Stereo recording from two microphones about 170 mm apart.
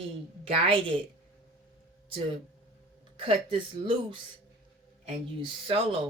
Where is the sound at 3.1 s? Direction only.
30° right (ahead or behind).